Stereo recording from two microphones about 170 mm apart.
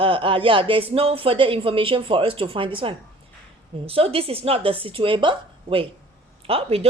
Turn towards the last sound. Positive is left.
turn(degrees=-35)  # may be behind; listen again after turning